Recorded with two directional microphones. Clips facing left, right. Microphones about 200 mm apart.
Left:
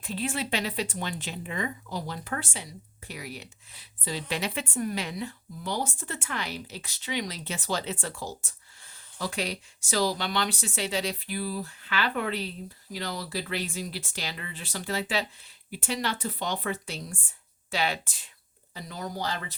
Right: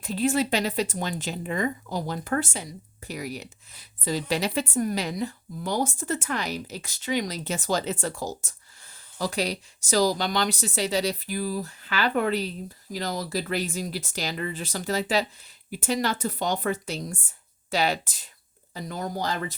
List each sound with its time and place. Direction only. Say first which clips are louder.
0.0 s a woman's voice: right 7 dB; 40° right (ahead or behind)